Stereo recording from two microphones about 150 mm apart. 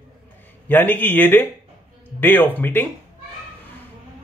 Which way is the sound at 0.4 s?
10° left (ahead or behind).